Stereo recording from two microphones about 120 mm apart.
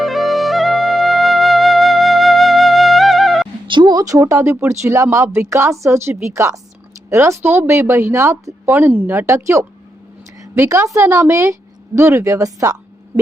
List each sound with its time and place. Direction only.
0.0 s music: centre (ahead or behind)
3.7 s speech: 40° right (ahead or behind)